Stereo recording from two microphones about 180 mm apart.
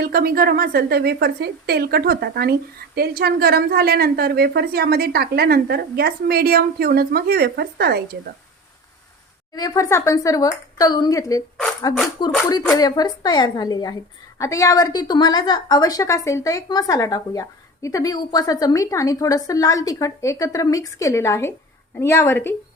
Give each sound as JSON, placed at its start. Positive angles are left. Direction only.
{"t": 0.0, "sound": "a woman's voice", "side_deg": -60}
{"t": 9.6, "sound": "a woman's voice", "side_deg": 20}